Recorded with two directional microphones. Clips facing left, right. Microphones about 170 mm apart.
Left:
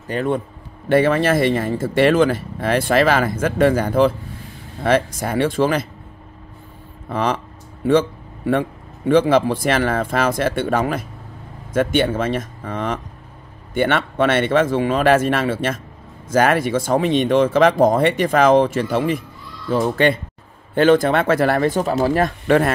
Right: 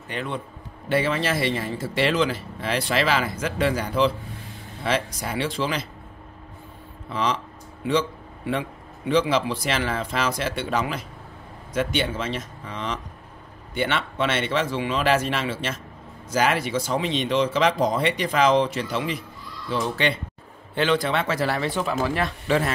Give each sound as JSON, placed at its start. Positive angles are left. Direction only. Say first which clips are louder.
{"t": 0.1, "sound": "speech", "louder": "left 9 dB", "side_deg": 45}
{"t": 7.1, "sound": "a man's voice", "louder": "left 5 dB", "side_deg": 55}